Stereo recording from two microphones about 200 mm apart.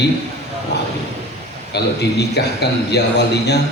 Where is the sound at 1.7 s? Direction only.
55° left (ahead or behind).